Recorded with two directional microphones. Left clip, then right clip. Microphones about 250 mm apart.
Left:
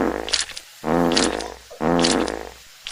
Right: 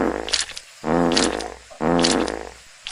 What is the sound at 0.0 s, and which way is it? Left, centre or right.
Roar, centre.